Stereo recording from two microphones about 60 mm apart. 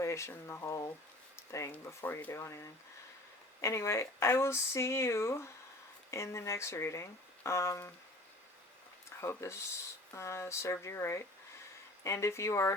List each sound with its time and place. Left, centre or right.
0.0 s speech: left
0.6 s speech: left
1.4 s a sound: left
1.8 s speech: left
9.4 s speech: left